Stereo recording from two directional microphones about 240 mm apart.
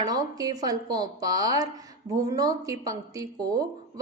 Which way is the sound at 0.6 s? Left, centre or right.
Centre.